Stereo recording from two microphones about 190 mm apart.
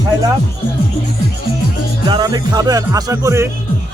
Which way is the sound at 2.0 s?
25° right (ahead or behind).